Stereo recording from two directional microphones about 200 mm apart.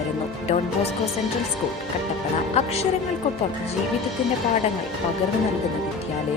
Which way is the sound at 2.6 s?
30° left (ahead or behind).